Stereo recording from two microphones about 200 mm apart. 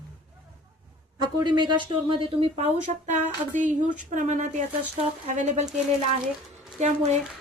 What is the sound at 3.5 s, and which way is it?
Speech, 40° right (ahead or behind).